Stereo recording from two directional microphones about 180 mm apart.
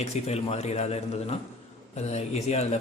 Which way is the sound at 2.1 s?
35° left (ahead or behind).